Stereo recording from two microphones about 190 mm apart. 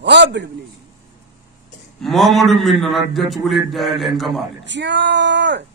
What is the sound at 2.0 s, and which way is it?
A man's voice, centre (ahead or behind).